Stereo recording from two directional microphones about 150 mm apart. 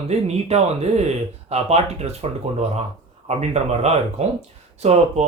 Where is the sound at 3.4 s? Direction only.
45° right (ahead or behind).